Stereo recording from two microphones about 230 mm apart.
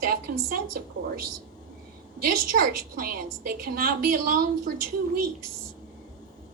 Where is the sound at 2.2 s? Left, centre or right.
Right.